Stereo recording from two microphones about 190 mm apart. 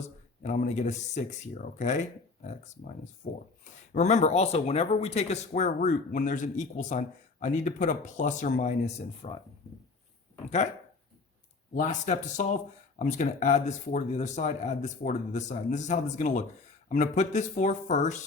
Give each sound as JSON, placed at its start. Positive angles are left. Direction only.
{"t": 0.4, "sound": "speech", "side_deg": 40}
{"t": 3.2, "sound": "speech", "side_deg": 40}
{"t": 11.7, "sound": "speech", "side_deg": 40}